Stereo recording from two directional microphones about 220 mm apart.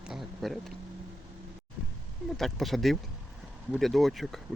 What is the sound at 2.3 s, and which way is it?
Speech, centre (ahead or behind).